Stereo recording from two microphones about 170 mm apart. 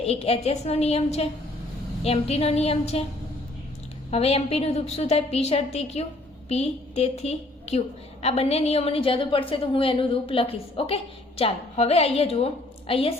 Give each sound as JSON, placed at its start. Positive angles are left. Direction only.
{"t": 0.0, "sound": "a woman's voice", "side_deg": 35}
{"t": 4.1, "sound": "a woman's voice", "side_deg": 35}